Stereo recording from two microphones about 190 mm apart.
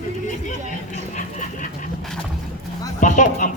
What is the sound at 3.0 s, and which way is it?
Speech, 40° left (ahead or behind).